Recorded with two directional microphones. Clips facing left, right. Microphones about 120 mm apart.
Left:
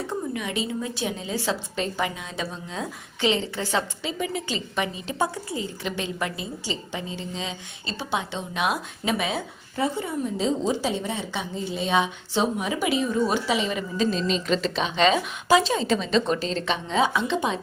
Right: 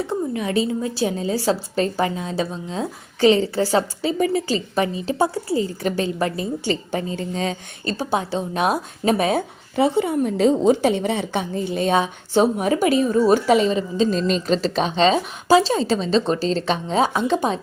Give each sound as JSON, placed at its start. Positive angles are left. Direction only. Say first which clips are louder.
{"t": 0.1, "sound": "a woman's voice", "louder": "right 6 dB", "side_deg": -35}
{"t": 9.7, "sound": "a woman's voice", "louder": "right 8 dB", "side_deg": -80}
{"t": 11.9, "sound": "a woman's voice", "louder": "right 4 dB", "side_deg": -45}
{"t": 13.7, "sound": "a woman's voice", "louder": "right 6 dB", "side_deg": -30}
{"t": 14.1, "sound": "a woman's voice", "louder": "right 4 dB", "side_deg": -45}